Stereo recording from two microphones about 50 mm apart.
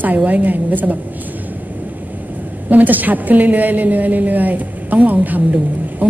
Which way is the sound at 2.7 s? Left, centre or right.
Right.